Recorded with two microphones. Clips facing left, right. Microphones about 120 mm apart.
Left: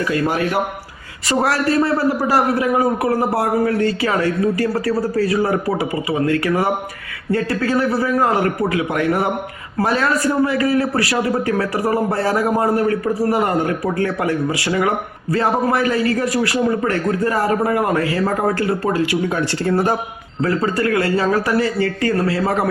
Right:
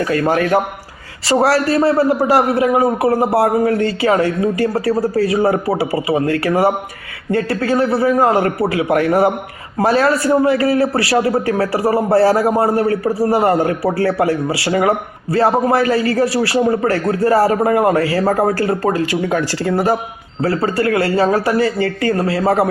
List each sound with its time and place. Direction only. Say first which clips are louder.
0.0 s a man's voice: right 3 dB; 45° right (ahead or behind)
1.3 s a man's voice: right 4 dB; 30° right (ahead or behind)
20.4 s a man's voice: right 2 dB; 30° right (ahead or behind)